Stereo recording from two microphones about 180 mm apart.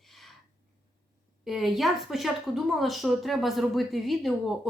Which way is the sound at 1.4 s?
Centre (ahead or behind).